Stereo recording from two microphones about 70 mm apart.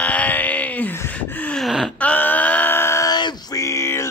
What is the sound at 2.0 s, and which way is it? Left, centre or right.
Wail, left.